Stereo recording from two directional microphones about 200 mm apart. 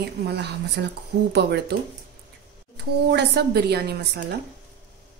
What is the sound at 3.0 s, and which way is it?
A woman's voice, 55° right (ahead or behind).